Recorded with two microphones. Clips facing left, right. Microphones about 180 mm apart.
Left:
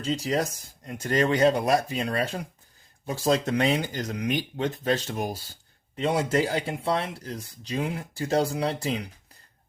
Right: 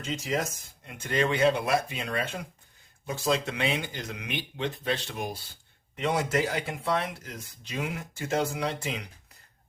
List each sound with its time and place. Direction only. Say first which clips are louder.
0.0 s speech: left 4 dB; 35° left (ahead or behind)
6.0 s speech: left 3 dB; 30° left (ahead or behind)